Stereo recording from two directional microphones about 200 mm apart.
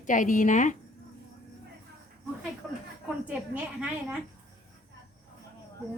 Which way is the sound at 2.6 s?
Centre (ahead or behind).